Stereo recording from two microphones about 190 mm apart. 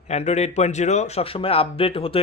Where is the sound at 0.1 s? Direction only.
35° left (ahead or behind).